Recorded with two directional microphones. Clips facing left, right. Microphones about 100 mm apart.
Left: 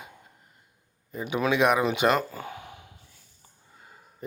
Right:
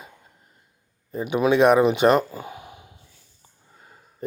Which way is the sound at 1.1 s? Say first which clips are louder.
Right 5 dB; 35° right (ahead or behind).